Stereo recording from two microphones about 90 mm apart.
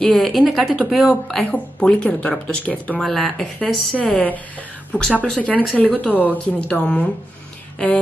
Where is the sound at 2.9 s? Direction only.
Centre (ahead or behind).